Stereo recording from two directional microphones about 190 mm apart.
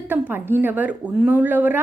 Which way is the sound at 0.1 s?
10° right (ahead or behind).